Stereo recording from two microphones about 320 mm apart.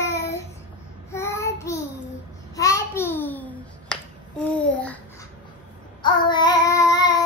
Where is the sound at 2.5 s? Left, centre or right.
Centre.